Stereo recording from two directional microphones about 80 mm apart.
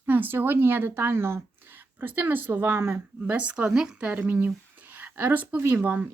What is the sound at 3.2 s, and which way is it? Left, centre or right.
Speech, centre.